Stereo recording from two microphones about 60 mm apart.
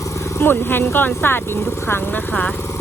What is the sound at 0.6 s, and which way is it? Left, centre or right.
Speech, left.